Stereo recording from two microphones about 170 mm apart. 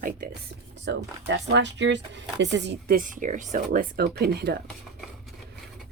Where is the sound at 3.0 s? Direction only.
50° right (ahead or behind).